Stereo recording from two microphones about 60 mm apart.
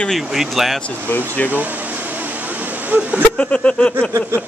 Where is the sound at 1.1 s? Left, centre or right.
Left.